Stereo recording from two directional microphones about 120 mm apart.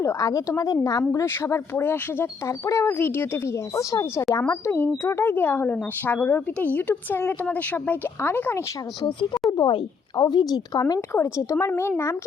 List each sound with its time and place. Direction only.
0.0 s a woman's voice: 25° left (ahead or behind)
9.0 s speech: 40° left (ahead or behind); by 12.1 s 20° left (ahead or behind)